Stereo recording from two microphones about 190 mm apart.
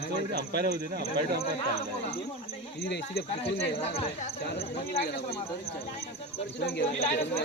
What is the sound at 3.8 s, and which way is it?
Speech, 35° left (ahead or behind).